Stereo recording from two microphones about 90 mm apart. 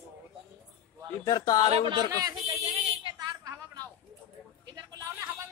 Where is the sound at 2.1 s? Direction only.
40° right (ahead or behind).